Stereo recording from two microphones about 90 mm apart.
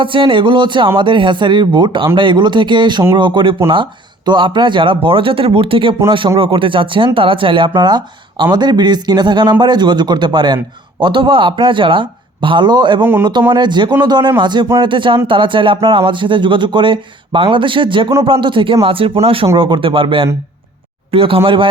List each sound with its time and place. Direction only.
0.0 s speech: 70° right (ahead or behind)
6.1 s speech: 70° right (ahead or behind)
7.8 s speech: 55° right (ahead or behind); by 19.5 s 90° right
19.5 s speech: 65° right (ahead or behind)
21.1 s speech: 90° right; by 21.7 s 70° right (ahead or behind)